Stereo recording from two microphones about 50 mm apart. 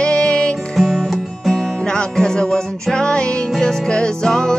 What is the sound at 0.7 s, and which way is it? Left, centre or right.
Music, centre.